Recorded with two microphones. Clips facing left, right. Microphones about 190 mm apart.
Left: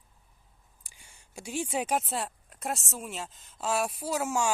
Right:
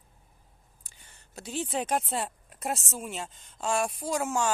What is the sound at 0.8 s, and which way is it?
A woman's voice, 10° left (ahead or behind).